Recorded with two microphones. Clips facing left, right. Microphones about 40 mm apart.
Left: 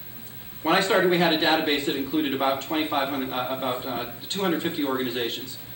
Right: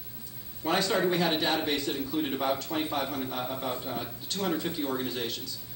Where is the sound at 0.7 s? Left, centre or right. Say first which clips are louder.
Left 6 dB; left.